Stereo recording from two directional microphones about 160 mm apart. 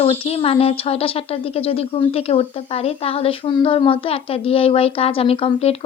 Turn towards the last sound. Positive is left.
turn(degrees=35)  # may be behind; listen again after turning